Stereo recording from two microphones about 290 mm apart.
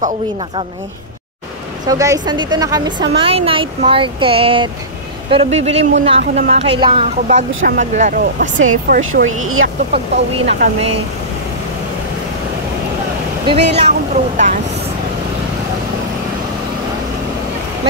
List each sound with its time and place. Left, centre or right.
1.9 s a woman's voice: centre; by 9.2 s right
9.2 s speech: right
9.9 s speech: right
13.7 s speech: right